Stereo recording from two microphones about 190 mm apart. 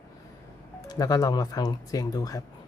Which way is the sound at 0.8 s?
20° left (ahead or behind).